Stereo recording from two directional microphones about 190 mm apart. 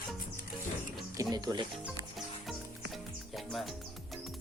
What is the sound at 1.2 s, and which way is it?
Speech, 20° right (ahead or behind).